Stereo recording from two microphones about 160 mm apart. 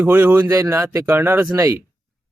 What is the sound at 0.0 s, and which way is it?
Speech, 10° right (ahead or behind).